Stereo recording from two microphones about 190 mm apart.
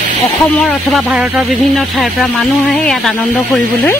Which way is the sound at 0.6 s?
5° left (ahead or behind).